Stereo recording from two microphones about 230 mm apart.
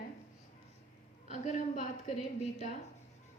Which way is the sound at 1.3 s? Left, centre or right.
Left.